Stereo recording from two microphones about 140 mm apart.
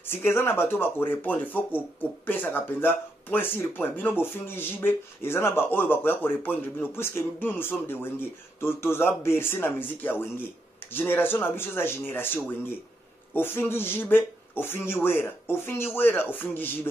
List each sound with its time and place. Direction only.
0.0 s speech: 15° left (ahead or behind)